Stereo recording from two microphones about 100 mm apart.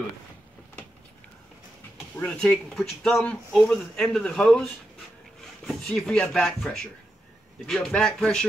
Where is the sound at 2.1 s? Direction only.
10° left (ahead or behind).